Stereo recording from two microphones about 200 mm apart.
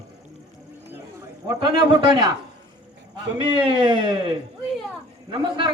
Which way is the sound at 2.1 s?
20° right (ahead or behind).